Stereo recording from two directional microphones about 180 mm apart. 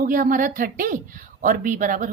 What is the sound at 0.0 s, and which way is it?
A woman's voice, 50° right (ahead or behind).